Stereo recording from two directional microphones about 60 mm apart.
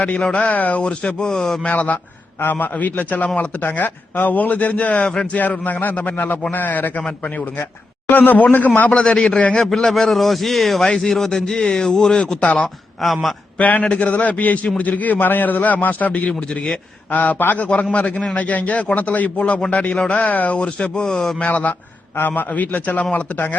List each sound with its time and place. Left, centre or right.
0.0 s a man's voice: centre
1.6 s a man's voice: left
5.4 s a man's voice: left
8.0 s a man's voice: left
8.9 s a man's voice: centre
9.6 s a man's voice: centre
12.6 s a man's voice: centre
13.6 s a man's voice: left
17.9 s a man's voice: centre
21.4 s a man's voice: left